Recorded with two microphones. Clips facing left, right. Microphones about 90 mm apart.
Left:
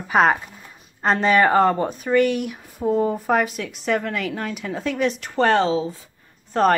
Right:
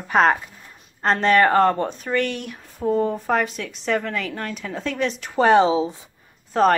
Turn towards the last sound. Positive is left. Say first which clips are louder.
# right 1 dB
turn(degrees=0)  # may be behind; listen again after turning